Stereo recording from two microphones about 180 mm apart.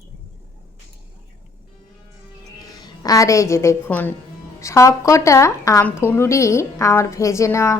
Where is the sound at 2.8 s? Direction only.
20° left (ahead or behind).